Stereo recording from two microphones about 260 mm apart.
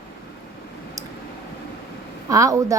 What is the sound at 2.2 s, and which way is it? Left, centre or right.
Speech, centre.